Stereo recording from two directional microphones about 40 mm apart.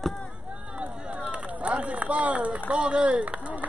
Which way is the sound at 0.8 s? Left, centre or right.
Right.